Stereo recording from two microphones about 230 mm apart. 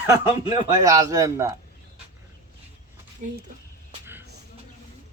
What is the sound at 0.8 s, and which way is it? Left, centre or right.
Speech, centre.